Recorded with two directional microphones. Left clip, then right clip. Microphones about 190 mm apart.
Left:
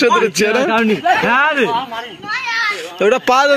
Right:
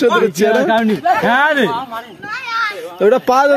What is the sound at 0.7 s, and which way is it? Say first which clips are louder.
Speech: even; 55° right (ahead or behind).